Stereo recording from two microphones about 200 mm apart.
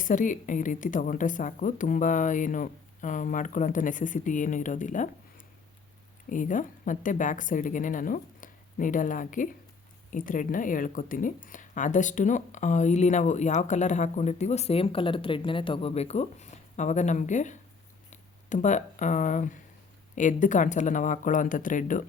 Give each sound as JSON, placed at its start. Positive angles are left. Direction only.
{"t": 0.0, "sound": "speech", "side_deg": 40}
{"t": 6.2, "sound": "speech", "side_deg": 40}